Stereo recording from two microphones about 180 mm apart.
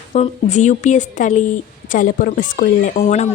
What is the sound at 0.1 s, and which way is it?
A woman's voice, 40° left (ahead or behind).